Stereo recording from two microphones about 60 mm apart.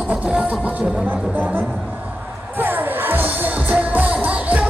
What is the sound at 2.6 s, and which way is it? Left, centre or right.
Music, right.